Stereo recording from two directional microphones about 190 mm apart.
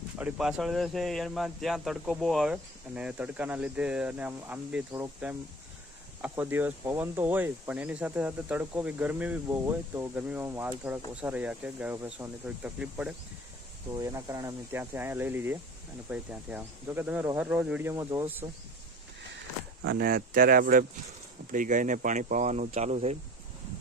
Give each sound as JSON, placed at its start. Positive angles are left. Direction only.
{"t": 0.2, "sound": "speech", "side_deg": -5}
{"t": 13.9, "sound": "speech", "side_deg": -15}
{"t": 19.8, "sound": "speech", "side_deg": -60}